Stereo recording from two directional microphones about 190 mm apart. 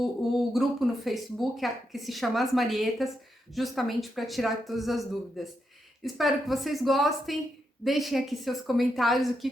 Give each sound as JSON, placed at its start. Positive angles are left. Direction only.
{"t": 0.0, "sound": "speech", "side_deg": 0}